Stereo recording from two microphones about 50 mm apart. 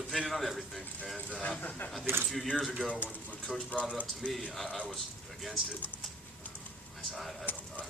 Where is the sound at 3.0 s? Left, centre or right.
Left.